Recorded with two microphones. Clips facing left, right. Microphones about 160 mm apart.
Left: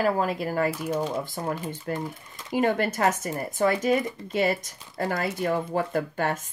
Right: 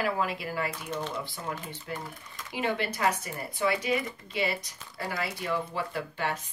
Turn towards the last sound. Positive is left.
turn(degrees=45)  # may be behind; listen again after turning